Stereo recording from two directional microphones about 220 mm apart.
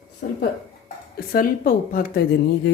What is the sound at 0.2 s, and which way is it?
A woman's voice, 40° left (ahead or behind).